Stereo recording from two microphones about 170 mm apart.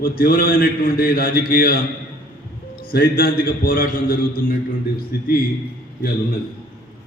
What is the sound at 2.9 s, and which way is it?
A man's voice, 60° left (ahead or behind).